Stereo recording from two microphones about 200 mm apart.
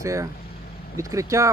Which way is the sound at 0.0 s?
15° right (ahead or behind).